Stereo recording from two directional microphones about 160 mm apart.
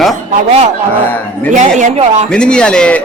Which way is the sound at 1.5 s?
45° right (ahead or behind).